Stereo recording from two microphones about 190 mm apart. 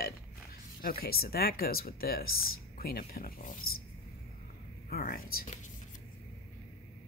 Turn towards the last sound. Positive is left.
turn(degrees=50)  # may be behind; listen again after turning